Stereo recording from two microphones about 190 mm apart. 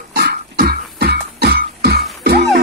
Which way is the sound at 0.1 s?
55° right (ahead or behind).